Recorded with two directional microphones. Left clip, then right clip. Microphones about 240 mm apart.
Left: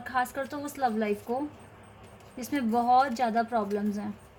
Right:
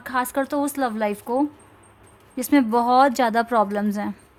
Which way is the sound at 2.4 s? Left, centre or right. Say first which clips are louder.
Right 9 dB; right.